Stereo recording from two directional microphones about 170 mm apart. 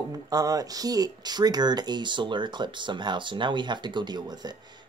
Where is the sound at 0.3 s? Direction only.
20° right (ahead or behind).